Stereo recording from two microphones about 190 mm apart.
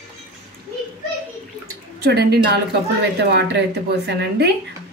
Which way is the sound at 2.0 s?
60° right (ahead or behind).